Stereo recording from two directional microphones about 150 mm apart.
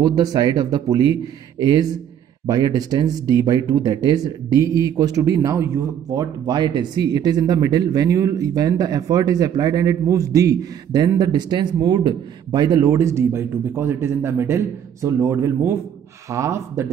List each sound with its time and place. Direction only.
0.0 s speech: 25° right (ahead or behind)